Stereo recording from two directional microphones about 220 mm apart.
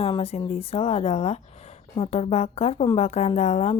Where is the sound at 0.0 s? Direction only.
25° left (ahead or behind).